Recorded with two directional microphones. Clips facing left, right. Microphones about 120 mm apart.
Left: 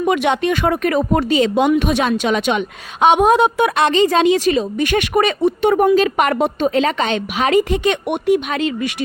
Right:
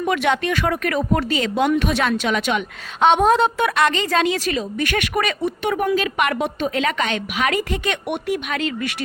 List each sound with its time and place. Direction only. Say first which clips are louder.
0.0 s a woman's voice: left 4 dB; 20° left (ahead or behind)